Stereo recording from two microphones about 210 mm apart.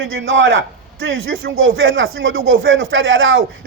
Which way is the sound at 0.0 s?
65° right (ahead or behind).